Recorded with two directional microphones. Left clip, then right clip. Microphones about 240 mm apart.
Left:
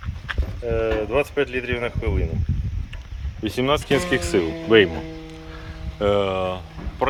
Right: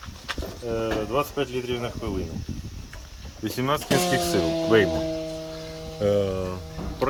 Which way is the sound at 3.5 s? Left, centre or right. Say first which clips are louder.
Left 5 dB; left.